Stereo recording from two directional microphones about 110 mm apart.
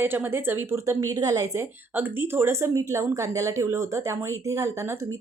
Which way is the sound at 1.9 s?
20° right (ahead or behind).